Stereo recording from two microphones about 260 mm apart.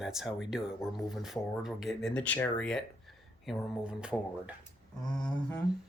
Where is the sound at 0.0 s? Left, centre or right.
Centre.